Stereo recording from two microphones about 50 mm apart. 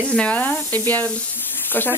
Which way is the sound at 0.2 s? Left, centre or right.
Left.